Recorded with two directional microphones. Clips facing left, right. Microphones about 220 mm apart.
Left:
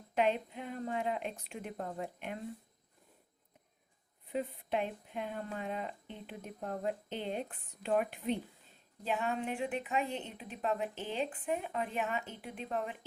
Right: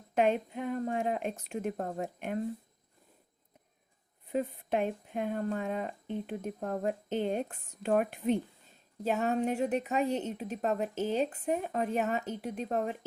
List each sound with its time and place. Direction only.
0.1 s speech: 45° right (ahead or behind)
4.3 s a woman's voice: 45° right (ahead or behind)